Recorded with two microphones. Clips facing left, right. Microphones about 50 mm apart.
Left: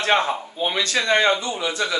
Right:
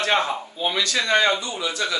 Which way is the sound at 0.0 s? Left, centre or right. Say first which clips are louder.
Left 2 dB; left.